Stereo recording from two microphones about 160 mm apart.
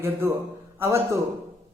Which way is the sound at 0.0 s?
15° right (ahead or behind).